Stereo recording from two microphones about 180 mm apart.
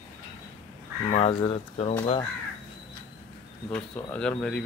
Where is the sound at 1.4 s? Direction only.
30° left (ahead or behind).